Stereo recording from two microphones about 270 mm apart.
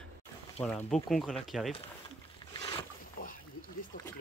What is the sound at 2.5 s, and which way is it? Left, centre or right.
Boat, centre.